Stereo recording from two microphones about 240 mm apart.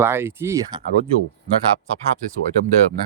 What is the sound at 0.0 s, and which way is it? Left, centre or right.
Speech, centre.